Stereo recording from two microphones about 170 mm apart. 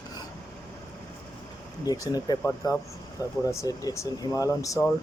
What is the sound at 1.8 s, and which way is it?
Speech, 20° left (ahead or behind).